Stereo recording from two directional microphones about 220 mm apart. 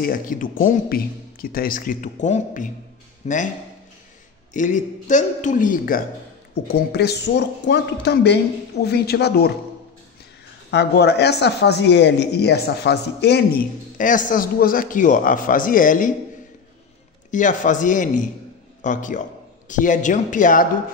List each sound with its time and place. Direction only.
0.0 s a man's voice: 40° left (ahead or behind)
4.6 s speech: 35° left (ahead or behind)
10.7 s speech: 50° left (ahead or behind)
17.3 s a man's voice: 35° left (ahead or behind)